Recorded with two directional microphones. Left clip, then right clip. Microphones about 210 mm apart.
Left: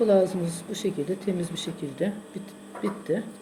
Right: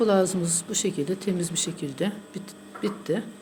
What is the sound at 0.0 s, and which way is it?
Speech, 50° right (ahead or behind).